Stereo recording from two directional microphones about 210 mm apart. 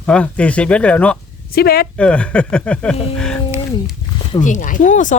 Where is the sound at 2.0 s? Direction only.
5° left (ahead or behind).